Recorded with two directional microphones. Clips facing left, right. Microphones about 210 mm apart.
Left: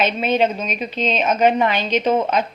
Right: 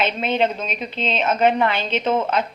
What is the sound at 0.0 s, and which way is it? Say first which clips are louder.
A woman's voice: left 2 dB; 15° left (ahead or behind).